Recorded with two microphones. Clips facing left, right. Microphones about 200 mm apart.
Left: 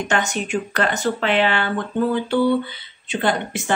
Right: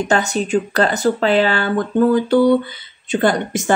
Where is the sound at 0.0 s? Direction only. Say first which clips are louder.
Right 5 dB; 35° right (ahead or behind).